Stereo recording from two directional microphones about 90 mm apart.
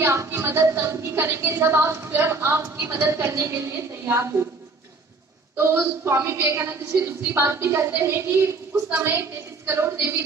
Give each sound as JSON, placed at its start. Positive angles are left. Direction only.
{"t": 0.0, "sound": "a woman's voice", "side_deg": -35}
{"t": 6.1, "sound": "a woman's voice", "side_deg": -30}